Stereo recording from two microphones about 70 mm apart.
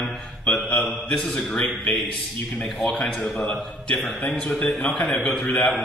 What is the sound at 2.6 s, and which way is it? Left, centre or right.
Speech, centre.